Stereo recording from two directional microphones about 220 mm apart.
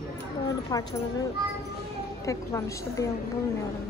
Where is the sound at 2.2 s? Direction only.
15° left (ahead or behind).